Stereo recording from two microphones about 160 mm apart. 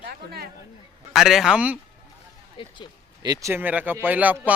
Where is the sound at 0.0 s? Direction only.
75° right (ahead or behind).